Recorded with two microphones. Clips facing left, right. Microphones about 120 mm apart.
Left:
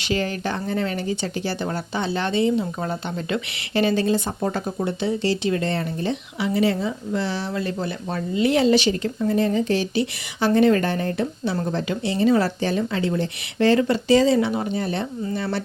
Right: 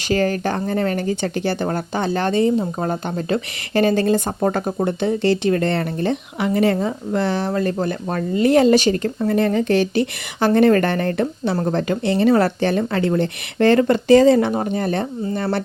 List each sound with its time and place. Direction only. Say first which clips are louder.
0.1 s speech: right 5 dB; 45° right (ahead or behind)
9.2 s a woman's voice: right 2 dB; 60° right (ahead or behind)